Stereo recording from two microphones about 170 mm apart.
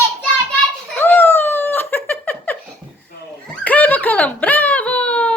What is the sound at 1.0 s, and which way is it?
Giggle, 10° left (ahead or behind).